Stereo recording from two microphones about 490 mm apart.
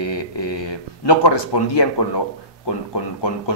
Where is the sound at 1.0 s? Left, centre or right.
Left.